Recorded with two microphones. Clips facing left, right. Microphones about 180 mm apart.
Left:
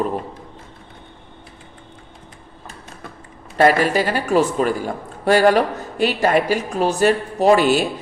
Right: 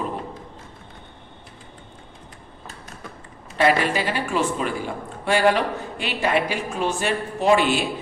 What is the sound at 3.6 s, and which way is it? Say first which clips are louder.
Speech: left 5 dB; 45° left (ahead or behind).